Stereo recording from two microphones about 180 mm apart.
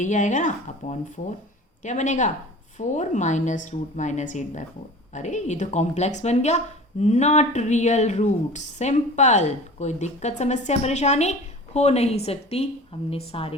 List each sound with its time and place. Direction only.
0.0 s speech: 45° left (ahead or behind)